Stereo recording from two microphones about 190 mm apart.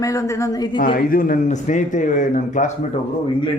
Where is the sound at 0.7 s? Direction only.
50° left (ahead or behind).